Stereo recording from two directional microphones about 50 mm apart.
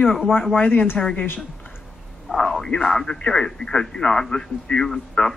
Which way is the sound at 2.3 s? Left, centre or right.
Centre.